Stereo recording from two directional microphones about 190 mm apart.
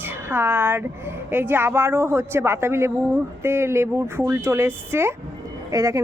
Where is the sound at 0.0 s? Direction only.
10° right (ahead or behind).